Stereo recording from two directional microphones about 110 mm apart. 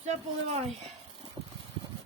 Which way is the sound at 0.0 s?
80° right.